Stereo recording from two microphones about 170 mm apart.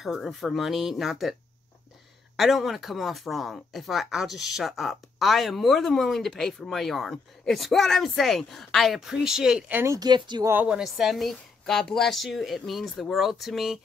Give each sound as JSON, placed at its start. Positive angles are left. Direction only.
{"t": 0.0, "sound": "speech", "side_deg": 0}
{"t": 2.3, "sound": "speech", "side_deg": 0}
{"t": 9.9, "sound": "speech", "side_deg": -25}
{"t": 10.5, "sound": "speech", "side_deg": -5}